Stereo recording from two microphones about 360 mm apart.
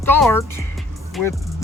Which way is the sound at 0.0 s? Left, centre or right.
Centre.